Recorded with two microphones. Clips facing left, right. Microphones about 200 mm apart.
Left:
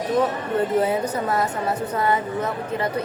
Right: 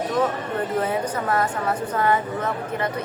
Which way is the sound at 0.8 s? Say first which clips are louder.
Left 2 dB; 25° left (ahead or behind).